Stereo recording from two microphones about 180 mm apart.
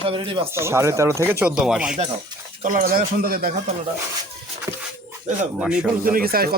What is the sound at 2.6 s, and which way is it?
Speech, 45° right (ahead or behind).